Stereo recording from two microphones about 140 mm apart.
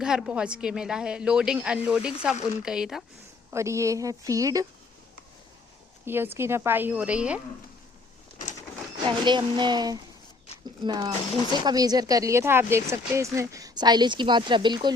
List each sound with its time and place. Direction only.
0.0 s a woman's voice: 5° right (ahead or behind)
3.5 s speech: 20° right (ahead or behind)
6.1 s a woman's voice: 15° right (ahead or behind)
9.0 s speech: 35° right (ahead or behind)